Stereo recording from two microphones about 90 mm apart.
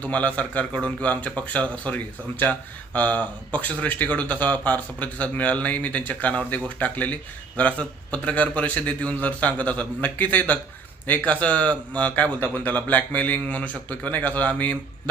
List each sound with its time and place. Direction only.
0.0 s speech: 15° left (ahead or behind)